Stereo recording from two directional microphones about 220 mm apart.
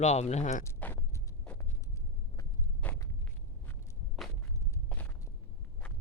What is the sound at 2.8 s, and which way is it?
Walk, 5° left (ahead or behind).